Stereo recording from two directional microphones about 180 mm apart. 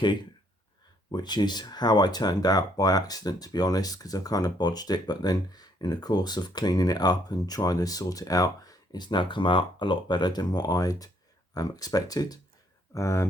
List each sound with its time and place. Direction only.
1.1 s speech: 25° left (ahead or behind)